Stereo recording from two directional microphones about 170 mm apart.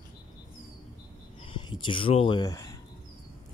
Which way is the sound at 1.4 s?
30° left (ahead or behind).